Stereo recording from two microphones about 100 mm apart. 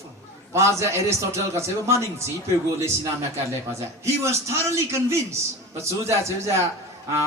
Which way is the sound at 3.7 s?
30° right (ahead or behind).